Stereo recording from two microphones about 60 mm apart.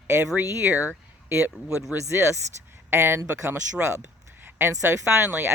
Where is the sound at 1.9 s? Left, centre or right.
Right.